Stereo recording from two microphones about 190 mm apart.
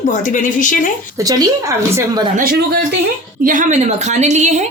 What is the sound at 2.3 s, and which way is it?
A man's voice, 50° right (ahead or behind).